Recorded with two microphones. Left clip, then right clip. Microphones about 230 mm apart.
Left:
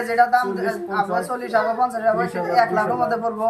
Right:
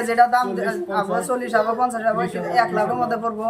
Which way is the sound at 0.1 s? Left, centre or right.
Centre.